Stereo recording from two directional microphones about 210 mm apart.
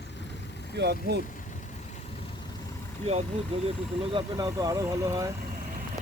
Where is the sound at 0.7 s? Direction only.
55° right (ahead or behind).